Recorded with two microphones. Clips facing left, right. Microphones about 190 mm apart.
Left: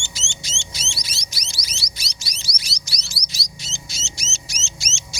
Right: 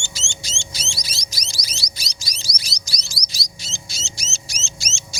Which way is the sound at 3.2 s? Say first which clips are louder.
Even; 40° right (ahead or behind).